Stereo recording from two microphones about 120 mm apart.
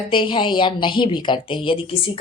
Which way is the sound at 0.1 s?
45° left (ahead or behind).